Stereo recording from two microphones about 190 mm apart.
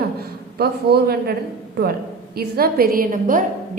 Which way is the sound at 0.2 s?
55° right (ahead or behind).